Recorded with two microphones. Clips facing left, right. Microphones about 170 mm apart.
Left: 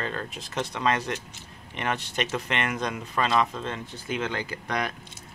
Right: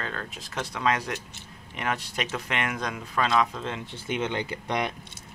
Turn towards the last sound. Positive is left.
turn(degrees=-25)  # may be behind; listen again after turning